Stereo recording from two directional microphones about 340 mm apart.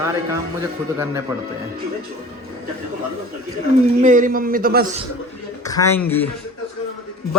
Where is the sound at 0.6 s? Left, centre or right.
Centre.